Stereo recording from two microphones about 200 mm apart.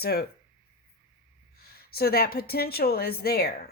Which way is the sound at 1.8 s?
50° left (ahead or behind).